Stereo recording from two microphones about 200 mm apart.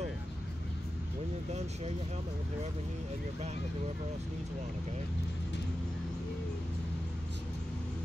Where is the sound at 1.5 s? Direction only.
35° right (ahead or behind).